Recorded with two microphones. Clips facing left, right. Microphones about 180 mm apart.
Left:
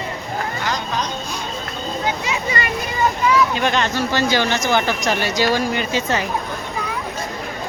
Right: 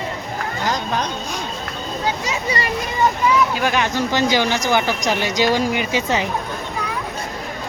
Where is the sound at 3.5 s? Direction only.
5° right (ahead or behind).